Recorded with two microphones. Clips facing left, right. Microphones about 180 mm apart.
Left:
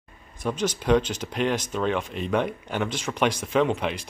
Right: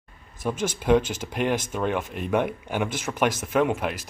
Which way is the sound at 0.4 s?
10° right (ahead or behind).